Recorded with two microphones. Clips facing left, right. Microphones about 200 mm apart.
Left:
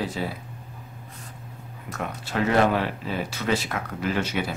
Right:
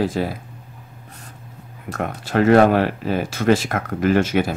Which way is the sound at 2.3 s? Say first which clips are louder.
Right 8 dB; 55° right (ahead or behind).